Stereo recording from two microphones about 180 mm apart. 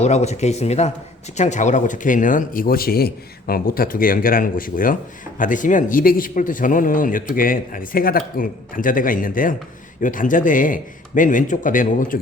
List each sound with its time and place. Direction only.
0.0 s speech: 40° left (ahead or behind)